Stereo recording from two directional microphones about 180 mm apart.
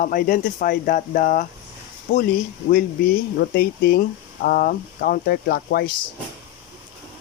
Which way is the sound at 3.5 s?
60° left (ahead or behind).